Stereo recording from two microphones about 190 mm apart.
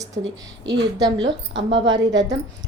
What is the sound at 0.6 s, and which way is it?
Speech, 20° right (ahead or behind).